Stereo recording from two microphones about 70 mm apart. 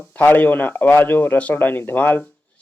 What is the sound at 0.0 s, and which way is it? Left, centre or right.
Speech, left.